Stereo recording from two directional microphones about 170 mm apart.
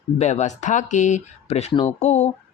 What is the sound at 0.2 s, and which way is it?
Speech, 40° left (ahead or behind).